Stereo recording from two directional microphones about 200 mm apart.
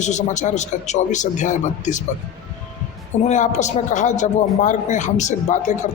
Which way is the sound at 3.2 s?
35° left (ahead or behind).